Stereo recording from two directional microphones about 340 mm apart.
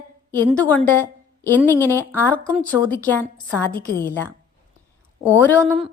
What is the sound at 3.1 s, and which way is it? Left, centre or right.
Speech, centre.